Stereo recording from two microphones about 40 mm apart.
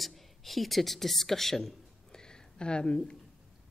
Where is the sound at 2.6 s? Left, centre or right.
Left.